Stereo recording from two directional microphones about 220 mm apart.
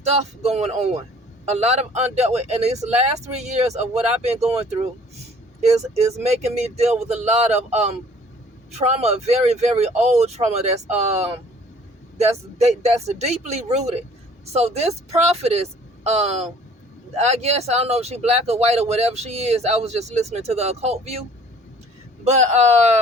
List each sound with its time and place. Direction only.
0.0 s speech: 30° right (ahead or behind)
6.2 s speech: 30° right (ahead or behind)